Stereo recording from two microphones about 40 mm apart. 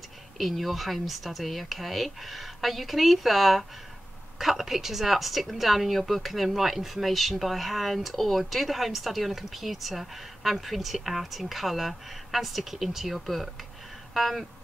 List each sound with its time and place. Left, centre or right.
0.4 s a woman's voice: centre